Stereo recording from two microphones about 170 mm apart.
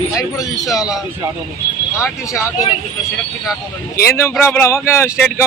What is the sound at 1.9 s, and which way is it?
Speech, 15° left (ahead or behind).